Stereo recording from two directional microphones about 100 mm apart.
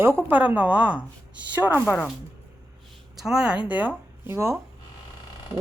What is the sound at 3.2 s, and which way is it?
Speech, 5° right (ahead or behind).